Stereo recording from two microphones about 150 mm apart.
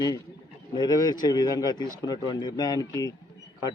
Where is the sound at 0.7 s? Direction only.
25° left (ahead or behind).